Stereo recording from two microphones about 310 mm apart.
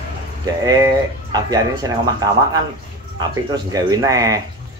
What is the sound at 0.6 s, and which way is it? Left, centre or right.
Speech, centre.